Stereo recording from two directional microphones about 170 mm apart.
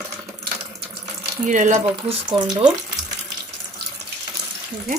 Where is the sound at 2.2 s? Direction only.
25° right (ahead or behind).